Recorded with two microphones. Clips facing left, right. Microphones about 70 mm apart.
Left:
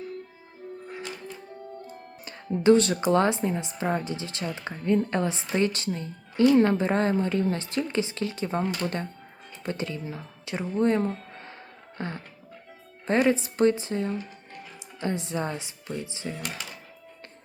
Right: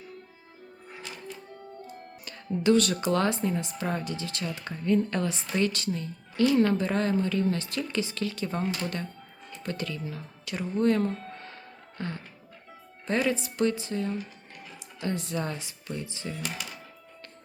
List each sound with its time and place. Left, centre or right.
2.2 s speech: left
11.9 s music: left
13.2 s speech: left